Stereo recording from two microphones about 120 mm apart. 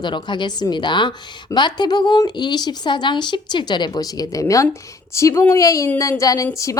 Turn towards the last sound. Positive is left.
turn(degrees=25)  # may be behind; listen again after turning